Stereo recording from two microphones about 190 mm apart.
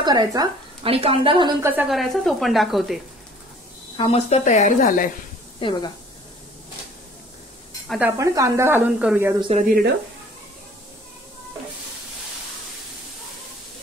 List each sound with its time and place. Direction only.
0.0 s speech: 20° right (ahead or behind)
0.8 s a woman's voice: 30° right (ahead or behind)
1.6 s a woman's voice: 10° right (ahead or behind)
3.9 s a woman's voice: 30° left (ahead or behind)
5.6 s a woman's voice: 25° left (ahead or behind)
8.0 s speech: 15° right (ahead or behind)
9.5 s speech: 30° right (ahead or behind)